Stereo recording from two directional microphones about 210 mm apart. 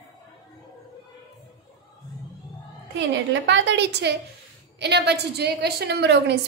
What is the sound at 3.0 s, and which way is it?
A woman's voice, 60° right (ahead or behind).